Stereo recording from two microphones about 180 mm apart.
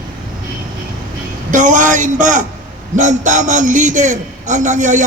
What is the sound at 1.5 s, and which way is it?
A man's voice, 45° right (ahead or behind).